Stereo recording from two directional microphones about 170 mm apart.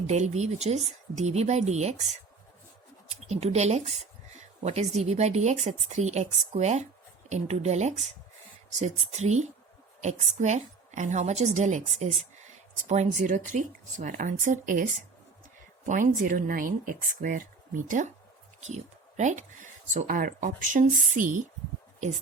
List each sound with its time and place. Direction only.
0.1 s a woman's voice: 40° right (ahead or behind)
15.9 s speech: 50° right (ahead or behind)